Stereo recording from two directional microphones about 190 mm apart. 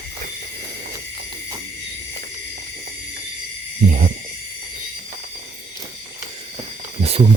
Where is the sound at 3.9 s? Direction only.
45° right (ahead or behind).